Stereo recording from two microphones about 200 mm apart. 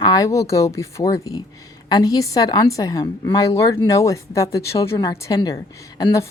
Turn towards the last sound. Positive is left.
turn(degrees=20)  # may be behind; listen again after turning